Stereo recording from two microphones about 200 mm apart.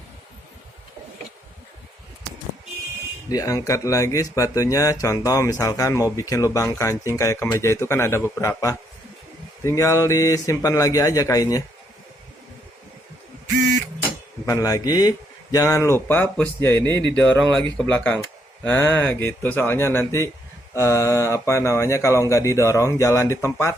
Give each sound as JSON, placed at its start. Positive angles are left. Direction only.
{"t": 3.2, "sound": "speech", "side_deg": 15}
{"t": 14.4, "sound": "speech", "side_deg": 15}